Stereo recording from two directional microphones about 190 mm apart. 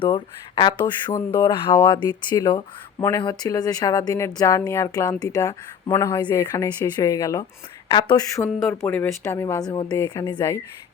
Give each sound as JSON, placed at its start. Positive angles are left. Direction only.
{"t": 0.0, "sound": "speech", "side_deg": 25}